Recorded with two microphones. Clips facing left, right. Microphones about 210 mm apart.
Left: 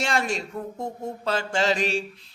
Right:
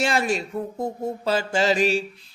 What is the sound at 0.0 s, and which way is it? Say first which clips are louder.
Speech: right 3 dB; 5° right (ahead or behind).